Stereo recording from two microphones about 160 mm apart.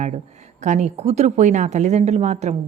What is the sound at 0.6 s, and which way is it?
A woman's voice, 50° right (ahead or behind).